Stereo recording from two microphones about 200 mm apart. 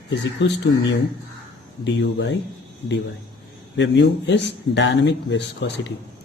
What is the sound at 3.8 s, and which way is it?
Speech, 60° left (ahead or behind).